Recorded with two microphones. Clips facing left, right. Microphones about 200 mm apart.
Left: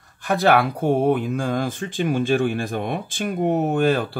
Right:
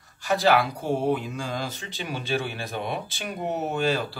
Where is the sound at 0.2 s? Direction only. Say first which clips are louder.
Left 3 dB; 55° left (ahead or behind).